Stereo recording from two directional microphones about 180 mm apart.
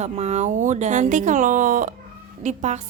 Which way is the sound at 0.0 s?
40° right (ahead or behind).